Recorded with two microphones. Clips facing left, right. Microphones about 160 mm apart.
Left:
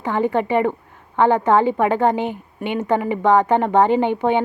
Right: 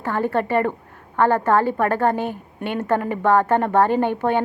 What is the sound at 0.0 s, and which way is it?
A woman's voice, 15° left (ahead or behind).